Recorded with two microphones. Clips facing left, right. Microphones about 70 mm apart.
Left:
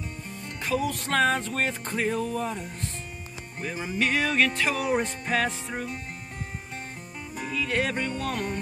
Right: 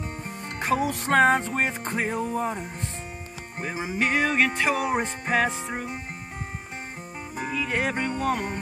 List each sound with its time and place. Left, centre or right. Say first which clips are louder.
0.3 s music: right 3 dB; right; by 5.9 s centre
7.3 s music: even; centre